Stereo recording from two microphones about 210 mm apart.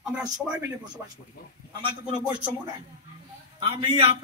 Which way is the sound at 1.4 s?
45° left (ahead or behind).